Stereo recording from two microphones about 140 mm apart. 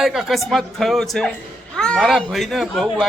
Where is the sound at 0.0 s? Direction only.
Centre (ahead or behind).